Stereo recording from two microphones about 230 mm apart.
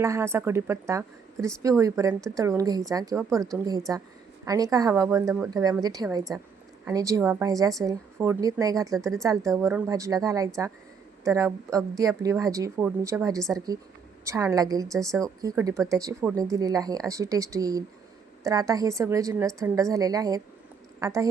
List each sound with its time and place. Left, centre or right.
0.0 s speech: centre